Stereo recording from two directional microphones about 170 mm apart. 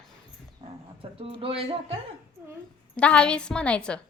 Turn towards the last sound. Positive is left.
turn(degrees=5)  # may be behind; listen again after turning